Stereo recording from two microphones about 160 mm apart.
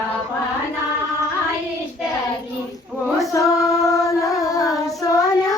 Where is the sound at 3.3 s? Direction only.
20° left (ahead or behind).